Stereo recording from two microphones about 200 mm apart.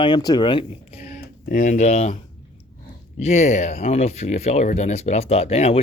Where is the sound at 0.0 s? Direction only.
20° left (ahead or behind).